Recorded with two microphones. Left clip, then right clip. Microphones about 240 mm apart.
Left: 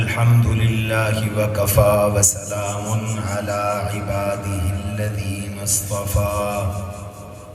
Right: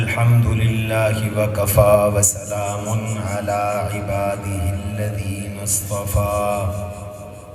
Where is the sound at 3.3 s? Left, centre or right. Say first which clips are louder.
Right 1 dB; right.